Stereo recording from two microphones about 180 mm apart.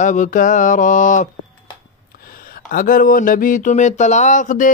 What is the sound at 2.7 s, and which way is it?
Speech, 50° left (ahead or behind).